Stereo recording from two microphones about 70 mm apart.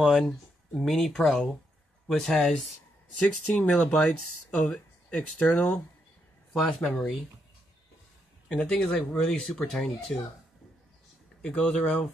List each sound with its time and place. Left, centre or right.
0.0 s speech: centre
3.2 s speech: centre
6.5 s speech: centre
8.5 s speech: centre
11.4 s speech: centre